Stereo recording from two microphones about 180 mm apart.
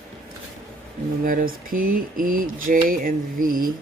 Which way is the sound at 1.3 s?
50° right (ahead or behind).